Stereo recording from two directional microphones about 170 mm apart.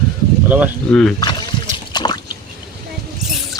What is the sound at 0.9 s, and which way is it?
Speech, 5° left (ahead or behind).